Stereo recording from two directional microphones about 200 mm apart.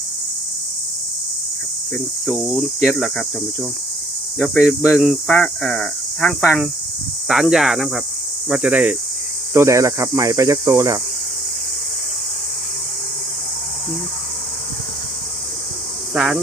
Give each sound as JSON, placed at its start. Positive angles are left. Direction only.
{"t": 2.2, "sound": "speech", "side_deg": 0}
{"t": 4.4, "sound": "speech", "side_deg": 5}
{"t": 16.1, "sound": "speech", "side_deg": 0}